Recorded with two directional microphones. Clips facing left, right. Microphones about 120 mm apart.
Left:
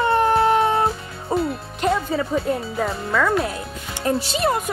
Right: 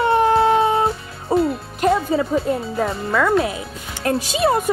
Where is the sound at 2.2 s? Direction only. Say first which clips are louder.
Right 2 dB; 5° right (ahead or behind).